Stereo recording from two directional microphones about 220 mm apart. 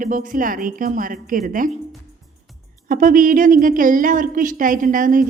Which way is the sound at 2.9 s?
35° right (ahead or behind).